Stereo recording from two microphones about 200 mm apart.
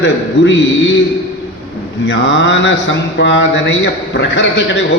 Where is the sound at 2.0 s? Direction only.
65° left (ahead or behind).